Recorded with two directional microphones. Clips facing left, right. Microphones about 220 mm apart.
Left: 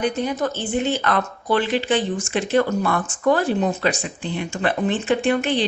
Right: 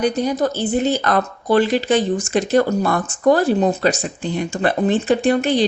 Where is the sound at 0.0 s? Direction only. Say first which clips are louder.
Right 4 dB; 40° right (ahead or behind).